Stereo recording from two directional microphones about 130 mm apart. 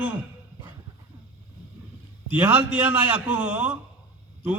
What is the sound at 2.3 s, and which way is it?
A man's voice, 10° right (ahead or behind).